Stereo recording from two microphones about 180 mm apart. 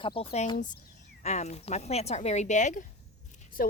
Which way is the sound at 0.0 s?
30° left (ahead or behind).